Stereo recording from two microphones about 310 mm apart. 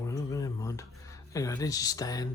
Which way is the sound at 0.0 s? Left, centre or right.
Centre.